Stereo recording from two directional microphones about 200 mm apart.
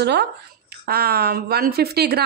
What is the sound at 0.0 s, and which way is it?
A woman's voice, 60° right (ahead or behind).